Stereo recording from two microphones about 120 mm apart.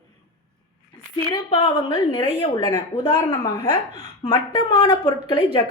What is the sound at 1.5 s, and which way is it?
A woman's voice, 50° left (ahead or behind).